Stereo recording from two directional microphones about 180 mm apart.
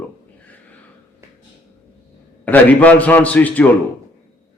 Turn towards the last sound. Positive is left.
turn(degrees=10)  # may be behind; listen again after turning